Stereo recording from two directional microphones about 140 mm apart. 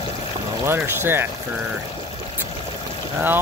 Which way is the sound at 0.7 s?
15° right (ahead or behind).